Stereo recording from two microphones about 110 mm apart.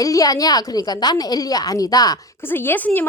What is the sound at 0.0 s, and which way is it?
A woman's voice, 35° left (ahead or behind).